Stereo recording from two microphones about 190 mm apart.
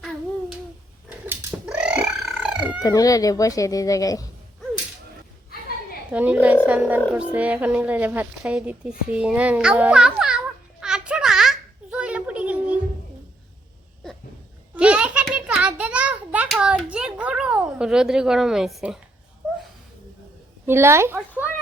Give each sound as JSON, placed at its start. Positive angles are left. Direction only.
{"t": 1.3, "sound": "cat", "side_deg": -10}
{"t": 2.8, "sound": "speech", "side_deg": 20}
{"t": 6.1, "sound": "a woman's voice", "side_deg": -10}
{"t": 7.1, "sound": "a sound", "side_deg": -5}
{"t": 14.8, "sound": "a sound", "side_deg": -5}
{"t": 20.7, "sound": "a woman's voice", "side_deg": -15}